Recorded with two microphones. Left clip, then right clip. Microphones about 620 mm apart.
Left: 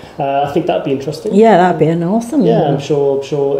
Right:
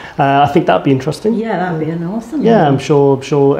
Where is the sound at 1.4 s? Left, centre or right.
Left.